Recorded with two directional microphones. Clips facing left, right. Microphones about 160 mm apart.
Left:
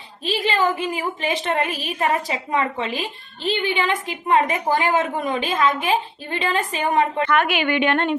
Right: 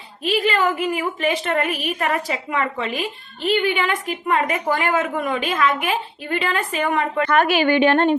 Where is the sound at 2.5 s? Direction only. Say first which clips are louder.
Left 2 dB; 20° left (ahead or behind).